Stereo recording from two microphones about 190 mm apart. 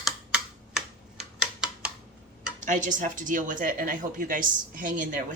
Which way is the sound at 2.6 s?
40° right (ahead or behind).